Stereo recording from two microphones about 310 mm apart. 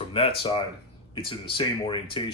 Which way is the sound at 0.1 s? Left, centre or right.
Centre.